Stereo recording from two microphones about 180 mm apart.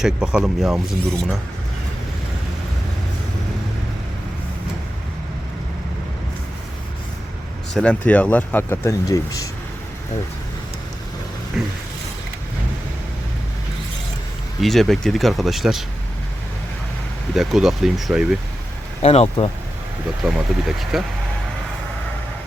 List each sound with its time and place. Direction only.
0.0 s speech: 5° right (ahead or behind)
7.7 s speech: 5° left (ahead or behind)
11.6 s speech: 5° right (ahead or behind)
14.6 s speech: centre (ahead or behind)
17.3 s speech: centre (ahead or behind)
19.0 s speech: 35° left (ahead or behind)
20.2 s speech: centre (ahead or behind)